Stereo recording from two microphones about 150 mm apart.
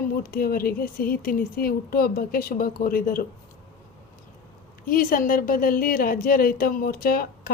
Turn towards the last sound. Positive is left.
turn(degrees=75)  # may be behind; listen again after turning